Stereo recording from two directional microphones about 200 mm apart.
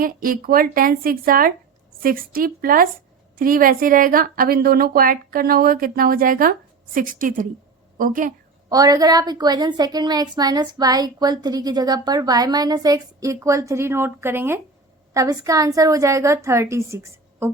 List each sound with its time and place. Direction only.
0.0 s speech: 45° right (ahead or behind)
8.7 s a woman's voice: 20° right (ahead or behind)